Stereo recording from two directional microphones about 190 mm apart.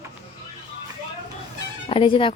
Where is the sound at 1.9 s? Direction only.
25° left (ahead or behind).